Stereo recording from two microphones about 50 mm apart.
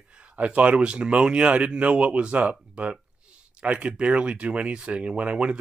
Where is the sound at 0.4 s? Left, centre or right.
Right.